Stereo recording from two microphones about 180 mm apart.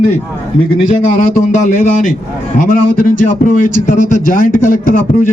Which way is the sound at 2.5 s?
50° left (ahead or behind).